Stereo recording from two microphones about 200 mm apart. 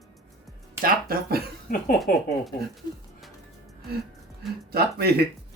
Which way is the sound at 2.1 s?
45° left (ahead or behind).